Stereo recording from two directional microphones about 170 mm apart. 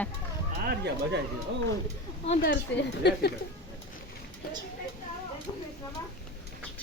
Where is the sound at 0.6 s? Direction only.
70° right (ahead or behind).